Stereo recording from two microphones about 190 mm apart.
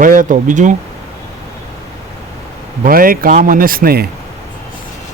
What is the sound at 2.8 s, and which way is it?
Speech, 50° right (ahead or behind).